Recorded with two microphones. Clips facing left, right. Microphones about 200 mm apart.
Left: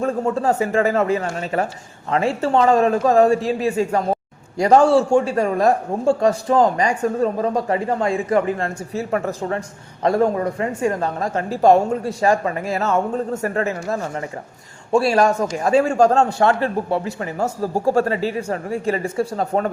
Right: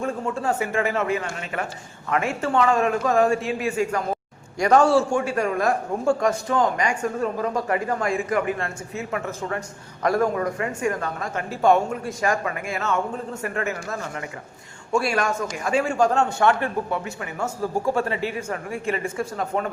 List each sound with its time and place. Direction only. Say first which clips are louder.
0.0 s a man's voice: left 6 dB; 40° left (ahead or behind)